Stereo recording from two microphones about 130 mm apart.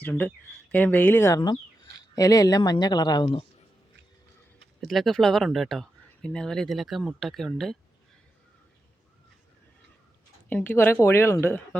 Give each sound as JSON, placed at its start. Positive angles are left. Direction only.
{"t": 0.0, "sound": "speech", "side_deg": 15}
{"t": 4.8, "sound": "speech", "side_deg": 0}
{"t": 10.5, "sound": "speech", "side_deg": 15}